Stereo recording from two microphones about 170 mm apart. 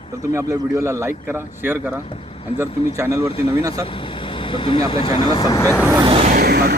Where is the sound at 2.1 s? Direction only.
35° left (ahead or behind).